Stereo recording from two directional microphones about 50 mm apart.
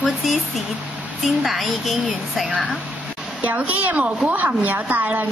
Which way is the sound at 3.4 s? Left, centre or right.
Right.